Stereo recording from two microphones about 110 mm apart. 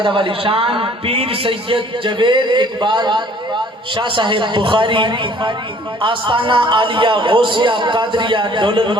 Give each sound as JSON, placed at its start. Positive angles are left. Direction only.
{"t": 0.0, "sound": "a man's voice", "side_deg": -50}